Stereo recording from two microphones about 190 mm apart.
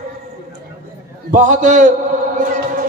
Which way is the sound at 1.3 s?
40° right (ahead or behind).